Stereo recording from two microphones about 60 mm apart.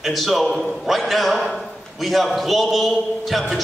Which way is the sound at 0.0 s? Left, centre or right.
Centre.